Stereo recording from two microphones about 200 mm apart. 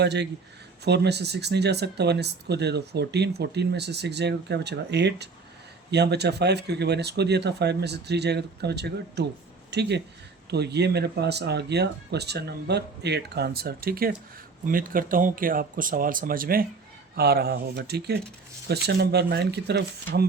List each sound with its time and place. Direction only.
0.0 s speech: 55° right (ahead or behind)